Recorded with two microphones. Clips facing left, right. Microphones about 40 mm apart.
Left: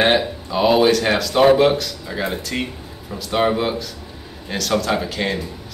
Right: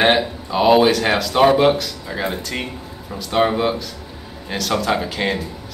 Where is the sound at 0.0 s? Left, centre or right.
Centre.